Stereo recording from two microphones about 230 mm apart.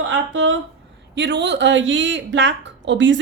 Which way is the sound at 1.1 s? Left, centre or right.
Right.